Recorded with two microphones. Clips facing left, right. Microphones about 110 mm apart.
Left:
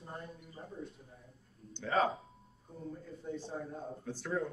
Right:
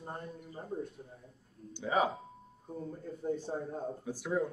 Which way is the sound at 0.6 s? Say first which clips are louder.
Right 4 dB; 55° right (ahead or behind).